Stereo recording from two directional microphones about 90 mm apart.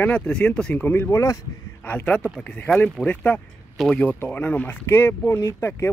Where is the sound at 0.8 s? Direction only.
25° left (ahead or behind).